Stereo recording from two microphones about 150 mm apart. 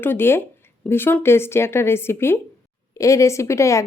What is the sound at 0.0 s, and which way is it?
A woman's voice, 15° left (ahead or behind).